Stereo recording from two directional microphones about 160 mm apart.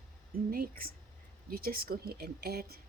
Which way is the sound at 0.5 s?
65° right (ahead or behind).